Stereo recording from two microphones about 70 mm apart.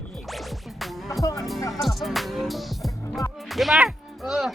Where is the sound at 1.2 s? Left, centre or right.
Left.